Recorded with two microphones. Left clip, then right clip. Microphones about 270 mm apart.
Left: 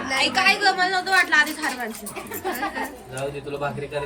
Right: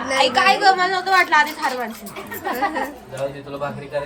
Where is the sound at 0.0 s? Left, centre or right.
Right.